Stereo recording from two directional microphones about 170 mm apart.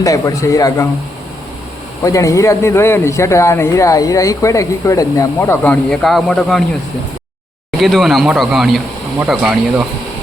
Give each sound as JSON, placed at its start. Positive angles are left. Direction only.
{"t": 0.0, "sound": "a man's voice", "side_deg": 20}
{"t": 2.0, "sound": "speech", "side_deg": 20}
{"t": 7.8, "sound": "speech", "side_deg": 0}